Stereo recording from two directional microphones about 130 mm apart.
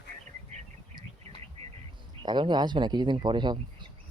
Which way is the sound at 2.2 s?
35° right (ahead or behind).